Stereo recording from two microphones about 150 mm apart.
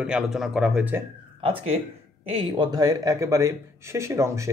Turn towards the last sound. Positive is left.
turn(degrees=-20)  # may be behind; listen again after turning